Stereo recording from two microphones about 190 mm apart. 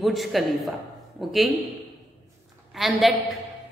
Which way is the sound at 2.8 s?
Centre (ahead or behind).